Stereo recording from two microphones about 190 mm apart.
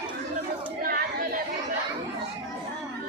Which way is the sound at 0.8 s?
50° right (ahead or behind).